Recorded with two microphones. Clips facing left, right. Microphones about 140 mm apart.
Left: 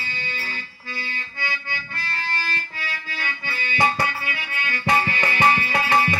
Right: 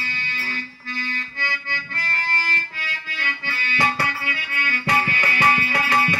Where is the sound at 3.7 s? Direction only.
20° left (ahead or behind).